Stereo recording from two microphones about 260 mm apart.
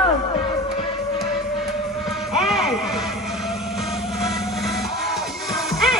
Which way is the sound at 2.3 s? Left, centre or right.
Centre.